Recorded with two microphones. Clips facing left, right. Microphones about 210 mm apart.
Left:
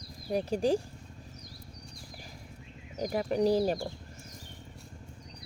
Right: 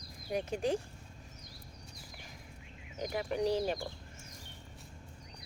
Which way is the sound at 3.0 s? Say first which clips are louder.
Left 5 dB; 40° left (ahead or behind).